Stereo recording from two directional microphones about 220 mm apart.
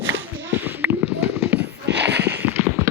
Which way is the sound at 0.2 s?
10° right (ahead or behind).